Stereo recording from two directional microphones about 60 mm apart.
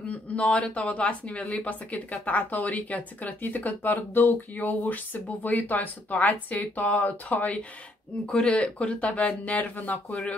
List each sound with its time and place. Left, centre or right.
0.1 s speech: left